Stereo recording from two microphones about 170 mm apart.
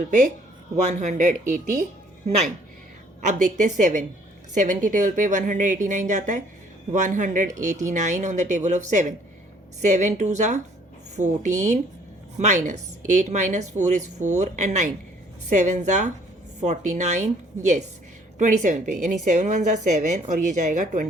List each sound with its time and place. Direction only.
0.9 s a woman's voice: 45° right (ahead or behind)